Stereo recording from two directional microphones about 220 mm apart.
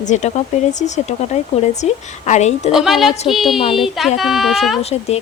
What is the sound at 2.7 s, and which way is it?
Speech, centre (ahead or behind).